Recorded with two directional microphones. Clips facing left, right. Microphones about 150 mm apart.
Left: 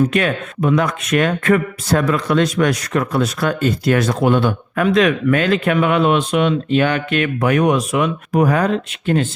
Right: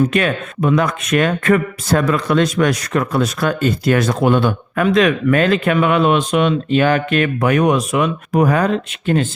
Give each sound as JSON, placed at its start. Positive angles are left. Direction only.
{"t": 0.1, "sound": "speech", "side_deg": -45}